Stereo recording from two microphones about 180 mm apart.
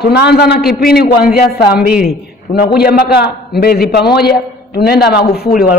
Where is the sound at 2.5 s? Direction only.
60° left (ahead or behind).